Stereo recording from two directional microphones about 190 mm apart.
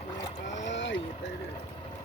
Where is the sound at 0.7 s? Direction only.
70° left (ahead or behind).